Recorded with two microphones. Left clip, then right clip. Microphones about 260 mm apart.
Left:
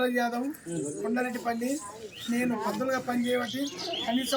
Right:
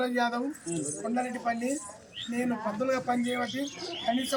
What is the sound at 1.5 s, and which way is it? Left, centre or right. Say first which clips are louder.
Speech: even; centre.